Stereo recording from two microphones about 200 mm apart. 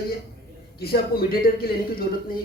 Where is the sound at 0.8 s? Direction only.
50° left (ahead or behind).